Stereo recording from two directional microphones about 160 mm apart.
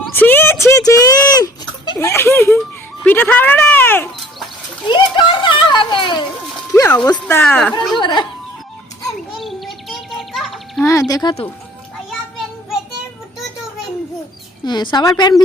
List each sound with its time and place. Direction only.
0.1 s a sound: 10° left (ahead or behind)
2.0 s speech: 15° left (ahead or behind)
4.9 s a child's voice: 30° left (ahead or behind)
7.4 s a woman's voice: 5° left (ahead or behind)
7.8 s a child's voice: 30° left (ahead or behind)
9.4 s bird: centre (ahead or behind)
11.1 s a child's voice: 25° left (ahead or behind)
14.6 s a child's voice: 25° left (ahead or behind)